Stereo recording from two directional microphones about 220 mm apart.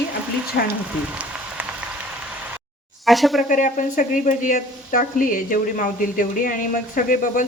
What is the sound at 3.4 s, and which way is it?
Speech, 35° left (ahead or behind).